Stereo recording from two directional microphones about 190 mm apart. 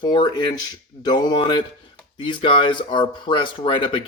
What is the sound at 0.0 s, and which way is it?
Speech, 25° left (ahead or behind).